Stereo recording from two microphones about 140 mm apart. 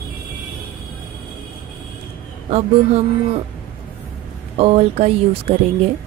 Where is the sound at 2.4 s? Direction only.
50° right (ahead or behind).